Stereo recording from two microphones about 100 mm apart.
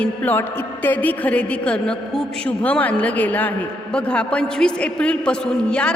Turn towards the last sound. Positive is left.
turn(degrees=10)  # may be behind; listen again after turning